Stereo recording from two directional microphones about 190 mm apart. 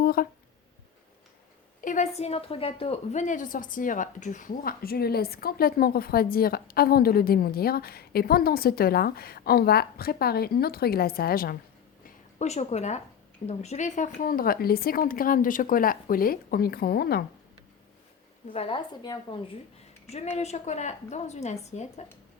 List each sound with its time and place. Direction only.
0.0 s a sound: 50° left (ahead or behind)
1.8 s a woman's voice: 40° left (ahead or behind)
12.0 s a sound: 35° left (ahead or behind)
13.5 s a woman's voice: 35° left (ahead or behind); by 17.2 s 55° left (ahead or behind)
18.5 s a woman's voice: 30° left (ahead or behind)
20.1 s a woman's voice: 35° left (ahead or behind)